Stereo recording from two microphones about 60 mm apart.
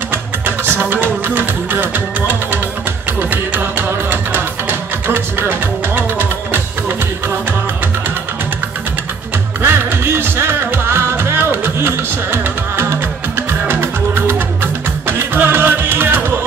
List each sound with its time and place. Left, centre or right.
0.1 s music: right
9.6 s music: right